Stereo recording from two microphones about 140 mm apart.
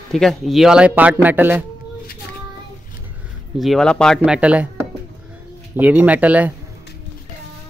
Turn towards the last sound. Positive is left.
turn(degrees=-10)  # may be behind; listen again after turning